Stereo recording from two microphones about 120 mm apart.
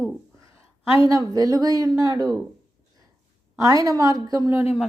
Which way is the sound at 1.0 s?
30° right (ahead or behind).